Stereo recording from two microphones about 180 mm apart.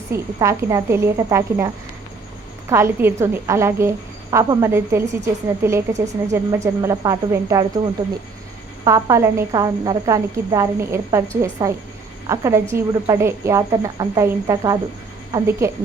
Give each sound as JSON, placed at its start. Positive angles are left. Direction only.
{"t": 0.1, "sound": "a woman's voice", "side_deg": -15}
{"t": 8.8, "sound": "a woman's voice", "side_deg": -20}